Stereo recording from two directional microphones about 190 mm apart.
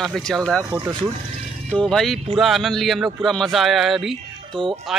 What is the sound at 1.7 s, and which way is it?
Speech, 5° left (ahead or behind).